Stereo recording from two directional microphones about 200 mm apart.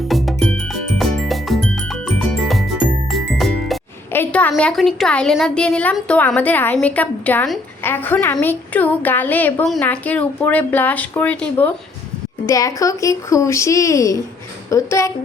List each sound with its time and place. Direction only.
0.1 s music: centre (ahead or behind)
4.1 s a woman's voice: 10° left (ahead or behind)